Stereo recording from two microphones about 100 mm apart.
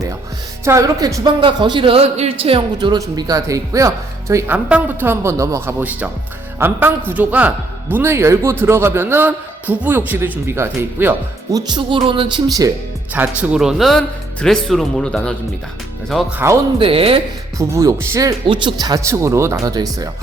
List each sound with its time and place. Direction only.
0.6 s speech: 30° right (ahead or behind)
1.4 s a man's voice: 50° right (ahead or behind); by 2.6 s 70° right (ahead or behind)
2.7 s speech: 45° right (ahead or behind)
4.4 s a man's voice: 15° right (ahead or behind)
11.9 s a man's voice: 60° right (ahead or behind)
12.5 s speech: 35° right (ahead or behind)
13.2 s speech: 15° right (ahead or behind)
13.6 s speech: centre (ahead or behind)
16.4 s a man's voice: 25° right (ahead or behind)
16.7 s speech: 65° right (ahead or behind)
17.6 s speech: 30° right (ahead or behind)
18.4 s speech: 50° right (ahead or behind)
18.9 s speech: 30° right (ahead or behind)